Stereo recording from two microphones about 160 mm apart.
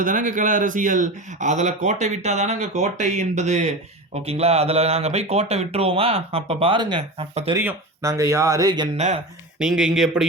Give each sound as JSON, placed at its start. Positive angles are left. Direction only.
{"t": 0.0, "sound": "speech", "side_deg": -55}
{"t": 7.5, "sound": "speech", "side_deg": -15}
{"t": 9.0, "sound": "speech", "side_deg": -45}
{"t": 9.6, "sound": "speech", "side_deg": -5}